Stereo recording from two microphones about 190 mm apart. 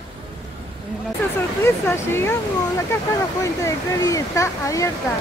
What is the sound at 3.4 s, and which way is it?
Speech, 15° left (ahead or behind).